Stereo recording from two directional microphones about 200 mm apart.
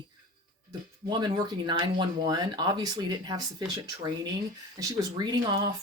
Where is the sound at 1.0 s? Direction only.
20° right (ahead or behind).